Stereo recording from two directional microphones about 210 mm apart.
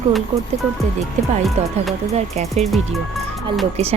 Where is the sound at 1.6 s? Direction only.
30° right (ahead or behind).